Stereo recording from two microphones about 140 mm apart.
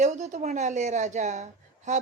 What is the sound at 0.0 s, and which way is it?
A woman's voice, 55° right (ahead or behind).